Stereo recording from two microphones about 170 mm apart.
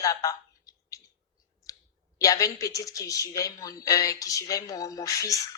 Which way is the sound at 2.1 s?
20° left (ahead or behind).